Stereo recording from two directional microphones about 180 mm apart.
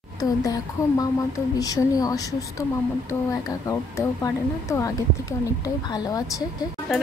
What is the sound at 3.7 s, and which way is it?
Speech, 15° left (ahead or behind).